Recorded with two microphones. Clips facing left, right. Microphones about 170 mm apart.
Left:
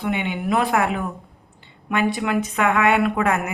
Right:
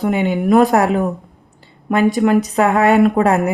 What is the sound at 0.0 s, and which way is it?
Speech, 40° right (ahead or behind).